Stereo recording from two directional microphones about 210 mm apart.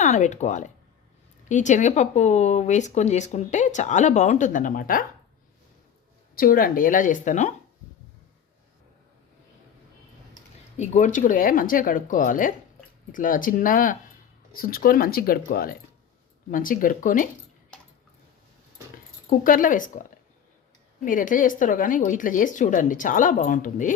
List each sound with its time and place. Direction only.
0.0 s speech: 35° left (ahead or behind)
6.3 s speech: 45° left (ahead or behind)
10.8 s speech: 35° left (ahead or behind)
19.3 s speech: 40° left (ahead or behind)